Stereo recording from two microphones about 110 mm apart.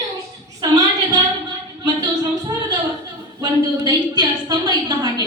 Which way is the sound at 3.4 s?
40° right (ahead or behind).